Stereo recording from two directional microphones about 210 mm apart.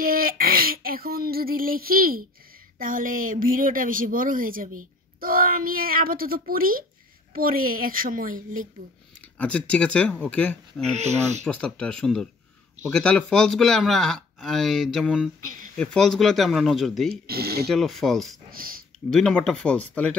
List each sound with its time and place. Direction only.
0.0 s a sound: 45° right (ahead or behind)
2.8 s speech: 40° right (ahead or behind)
9.4 s speech: 5° left (ahead or behind)
10.9 s speech: 30° right (ahead or behind)
11.4 s speech: 5° left (ahead or behind)
15.4 s a sound: 40° right (ahead or behind)
15.7 s speech: 5° left (ahead or behind)
17.1 s speech: 50° right (ahead or behind)
17.6 s speech: centre (ahead or behind)
18.5 s a sound: 45° right (ahead or behind)
19.0 s speech: 5° left (ahead or behind)